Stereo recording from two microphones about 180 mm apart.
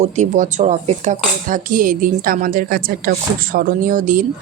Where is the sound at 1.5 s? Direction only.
50° right (ahead or behind).